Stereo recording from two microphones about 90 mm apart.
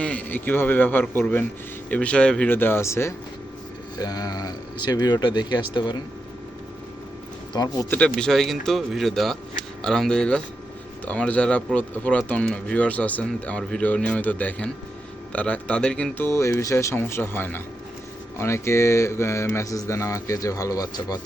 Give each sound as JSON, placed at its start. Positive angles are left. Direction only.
{"t": 0.0, "sound": "speech", "side_deg": 15}
{"t": 2.5, "sound": "speech", "side_deg": 25}
{"t": 3.9, "sound": "speech", "side_deg": 45}
{"t": 7.5, "sound": "speech", "side_deg": 45}
{"t": 7.9, "sound": "speech", "side_deg": 15}
{"t": 8.3, "sound": "speech", "side_deg": 0}
{"t": 16.1, "sound": "speech", "side_deg": 30}